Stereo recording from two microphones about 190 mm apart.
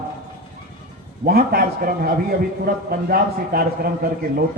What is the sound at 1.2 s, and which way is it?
A man's voice, 55° right (ahead or behind).